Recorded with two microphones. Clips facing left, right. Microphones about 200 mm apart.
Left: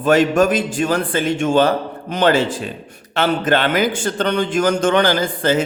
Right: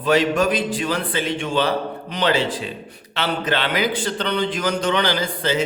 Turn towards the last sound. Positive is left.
turn(degrees=50)  # may be behind; listen again after turning